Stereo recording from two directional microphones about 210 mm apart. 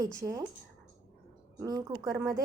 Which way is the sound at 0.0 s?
15° right (ahead or behind).